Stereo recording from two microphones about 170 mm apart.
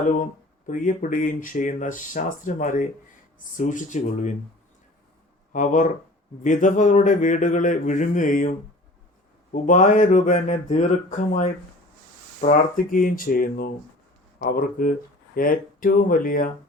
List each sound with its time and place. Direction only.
0.7 s speech: 55° left (ahead or behind)
5.5 s speech: 50° left (ahead or behind)